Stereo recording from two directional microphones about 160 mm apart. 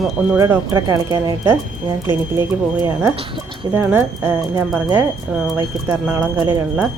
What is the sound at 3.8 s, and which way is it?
Speech, 15° right (ahead or behind).